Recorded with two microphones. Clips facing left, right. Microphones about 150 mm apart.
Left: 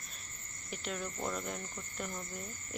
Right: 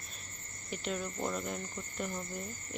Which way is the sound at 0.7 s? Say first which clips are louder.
Right 3 dB; 5° right (ahead or behind).